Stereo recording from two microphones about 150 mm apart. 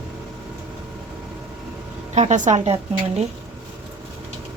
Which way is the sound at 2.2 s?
55° right (ahead or behind).